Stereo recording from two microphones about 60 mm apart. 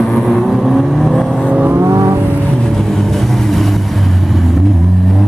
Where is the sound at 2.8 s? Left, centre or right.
Centre.